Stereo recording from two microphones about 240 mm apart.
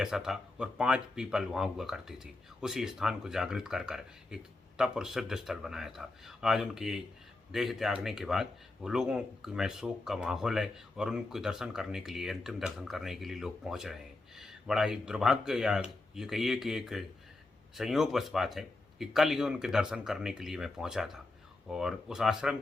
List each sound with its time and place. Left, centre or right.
0.0 s speech: centre